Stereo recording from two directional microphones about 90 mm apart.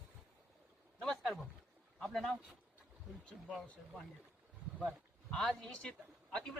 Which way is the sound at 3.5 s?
Centre (ahead or behind).